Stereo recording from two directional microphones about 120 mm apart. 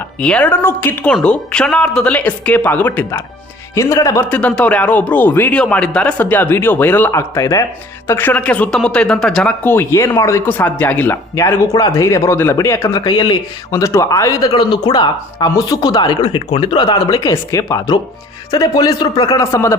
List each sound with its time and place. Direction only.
0.2 s speech: 10° left (ahead or behind)
3.8 s speech: 25° left (ahead or behind)
4.3 s speech: 10° left (ahead or behind)
9.7 s speech: 25° left (ahead or behind)
13.1 s speech: 40° left (ahead or behind)
13.7 s speech: 25° left (ahead or behind)